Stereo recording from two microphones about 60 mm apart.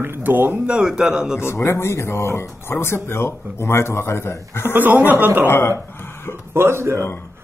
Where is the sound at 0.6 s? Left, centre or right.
Centre.